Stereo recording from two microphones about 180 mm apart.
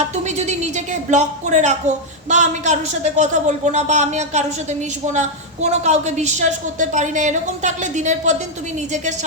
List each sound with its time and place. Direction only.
0.3 s a woman's voice: 40° right (ahead or behind)